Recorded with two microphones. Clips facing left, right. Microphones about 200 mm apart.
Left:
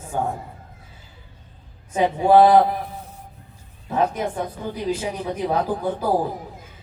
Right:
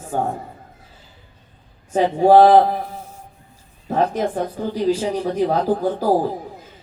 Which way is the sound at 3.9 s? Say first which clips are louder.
Right 3 dB; 40° right (ahead or behind).